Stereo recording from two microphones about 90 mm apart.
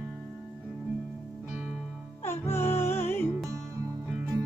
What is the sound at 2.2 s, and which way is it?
Music, 25° left (ahead or behind).